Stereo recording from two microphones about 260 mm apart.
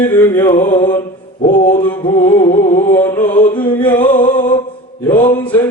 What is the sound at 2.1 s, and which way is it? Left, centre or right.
Music, left.